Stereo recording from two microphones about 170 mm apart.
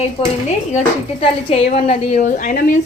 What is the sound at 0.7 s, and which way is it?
Speech, 40° left (ahead or behind).